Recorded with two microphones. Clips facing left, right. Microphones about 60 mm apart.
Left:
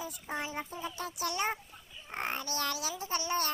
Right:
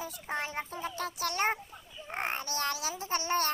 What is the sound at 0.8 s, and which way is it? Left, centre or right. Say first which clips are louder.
Speech: right 2 dB; right.